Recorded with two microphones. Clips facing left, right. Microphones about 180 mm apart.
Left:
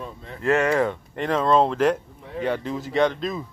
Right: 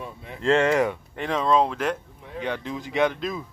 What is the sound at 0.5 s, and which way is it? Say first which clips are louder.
Speech: even; 25° right (ahead or behind).